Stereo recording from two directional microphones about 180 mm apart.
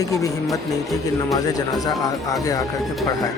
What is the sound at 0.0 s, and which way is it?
Speech, 20° left (ahead or behind).